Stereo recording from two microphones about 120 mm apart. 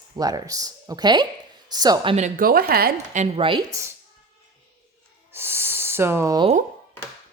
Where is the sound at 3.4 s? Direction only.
45° right (ahead or behind).